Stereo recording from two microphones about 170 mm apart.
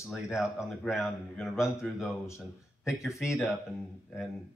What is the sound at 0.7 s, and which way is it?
Speech, centre (ahead or behind).